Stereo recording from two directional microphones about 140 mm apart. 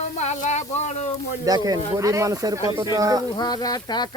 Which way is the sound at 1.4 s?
25° right (ahead or behind).